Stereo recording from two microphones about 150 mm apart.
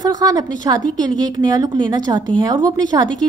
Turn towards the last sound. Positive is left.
turn(degrees=-25)  # may be behind; listen again after turning